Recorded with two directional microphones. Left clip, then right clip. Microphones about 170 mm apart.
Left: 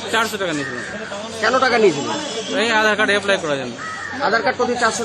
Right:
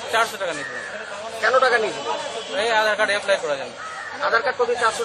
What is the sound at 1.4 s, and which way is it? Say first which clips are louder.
Speech: left 1 dB; 40° left (ahead or behind).